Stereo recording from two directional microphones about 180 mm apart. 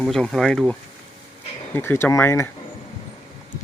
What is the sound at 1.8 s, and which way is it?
Speech, 15° left (ahead or behind).